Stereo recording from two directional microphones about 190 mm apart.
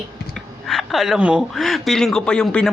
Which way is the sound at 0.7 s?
Centre (ahead or behind).